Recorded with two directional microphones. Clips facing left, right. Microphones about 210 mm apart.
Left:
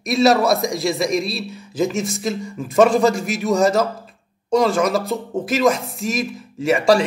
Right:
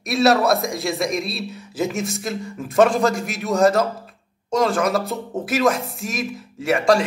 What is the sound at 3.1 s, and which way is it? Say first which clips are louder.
Speech: left 3 dB; 50° right (ahead or behind).